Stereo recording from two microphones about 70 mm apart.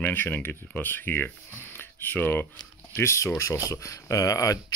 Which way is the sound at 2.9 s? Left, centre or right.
Left.